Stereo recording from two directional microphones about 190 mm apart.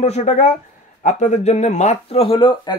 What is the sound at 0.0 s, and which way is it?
Speech, 40° left (ahead or behind).